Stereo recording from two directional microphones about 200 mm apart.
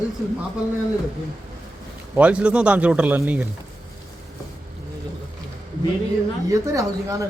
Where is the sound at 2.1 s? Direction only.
5° right (ahead or behind).